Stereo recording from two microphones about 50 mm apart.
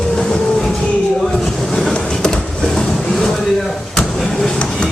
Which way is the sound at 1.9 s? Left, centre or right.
Centre.